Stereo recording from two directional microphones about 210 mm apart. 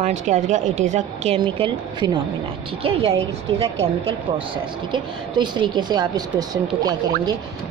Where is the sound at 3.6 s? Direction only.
25° right (ahead or behind).